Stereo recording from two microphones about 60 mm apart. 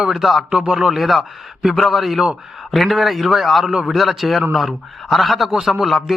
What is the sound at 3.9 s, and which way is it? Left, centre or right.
Speech, centre.